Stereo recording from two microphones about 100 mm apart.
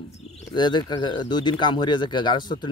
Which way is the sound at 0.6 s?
45° left (ahead or behind).